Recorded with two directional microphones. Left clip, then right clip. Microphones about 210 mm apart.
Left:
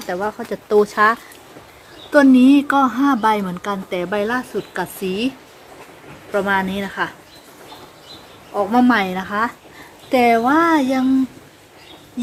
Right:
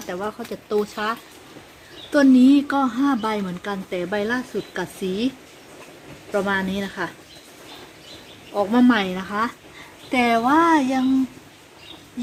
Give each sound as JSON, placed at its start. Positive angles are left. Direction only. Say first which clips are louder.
{"t": 0.1, "sound": "speech", "louder": "left 6 dB", "side_deg": 10}
{"t": 0.7, "sound": "speech", "louder": "left 10 dB", "side_deg": 20}
{"t": 2.5, "sound": "speech", "louder": "left 4 dB", "side_deg": 5}
{"t": 6.3, "sound": "speech", "louder": "left 4 dB", "side_deg": 0}
{"t": 8.5, "sound": "speech", "louder": "left 3 dB", "side_deg": -5}